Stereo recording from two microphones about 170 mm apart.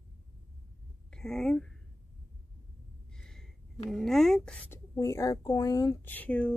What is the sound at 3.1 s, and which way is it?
Gasp, 5° left (ahead or behind).